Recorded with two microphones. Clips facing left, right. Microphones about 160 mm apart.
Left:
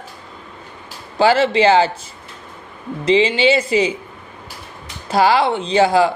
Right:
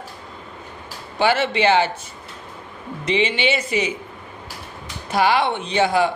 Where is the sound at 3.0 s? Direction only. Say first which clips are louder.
Left 6 dB; 30° left (ahead or behind).